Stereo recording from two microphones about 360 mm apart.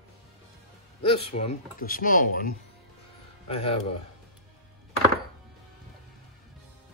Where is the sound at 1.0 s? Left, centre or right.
Centre.